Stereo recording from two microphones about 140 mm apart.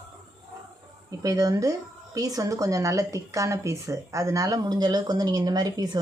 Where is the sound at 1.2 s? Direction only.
25° right (ahead or behind).